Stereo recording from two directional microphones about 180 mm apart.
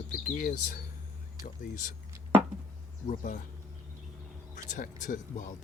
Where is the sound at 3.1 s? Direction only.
45° left (ahead or behind).